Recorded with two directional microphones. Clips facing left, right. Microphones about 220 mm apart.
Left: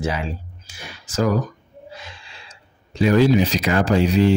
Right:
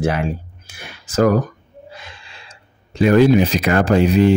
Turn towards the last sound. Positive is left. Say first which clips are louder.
# right 3 dB
turn(degrees=-55)  # may be behind; listen again after turning